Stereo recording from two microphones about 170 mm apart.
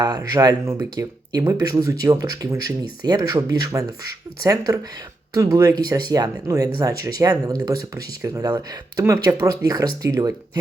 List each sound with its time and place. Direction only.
0.0 s speech: 20° right (ahead or behind)